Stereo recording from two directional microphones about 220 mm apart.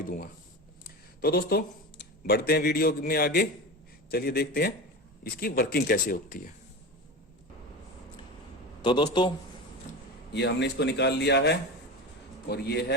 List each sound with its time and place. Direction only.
1.2 s speech: 45° left (ahead or behind)
8.8 s a man's voice: 20° left (ahead or behind)
10.3 s speech: 50° left (ahead or behind)